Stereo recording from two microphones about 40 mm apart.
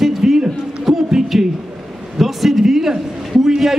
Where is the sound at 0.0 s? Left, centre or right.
Centre.